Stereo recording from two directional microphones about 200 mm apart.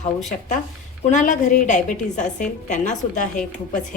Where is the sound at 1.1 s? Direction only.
40° left (ahead or behind).